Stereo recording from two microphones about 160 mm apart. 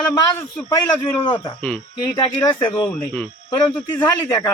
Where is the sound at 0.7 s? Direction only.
25° left (ahead or behind).